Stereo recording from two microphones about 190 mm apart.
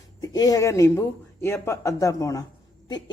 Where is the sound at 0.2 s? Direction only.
20° left (ahead or behind).